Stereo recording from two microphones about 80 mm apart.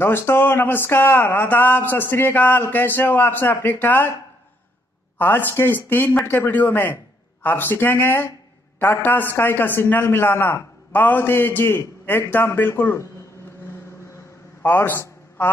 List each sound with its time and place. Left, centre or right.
0.0 s a man's voice: left
5.2 s a man's voice: left
14.6 s a sound: left